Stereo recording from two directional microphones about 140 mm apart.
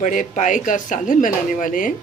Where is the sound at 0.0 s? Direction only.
65° left (ahead or behind).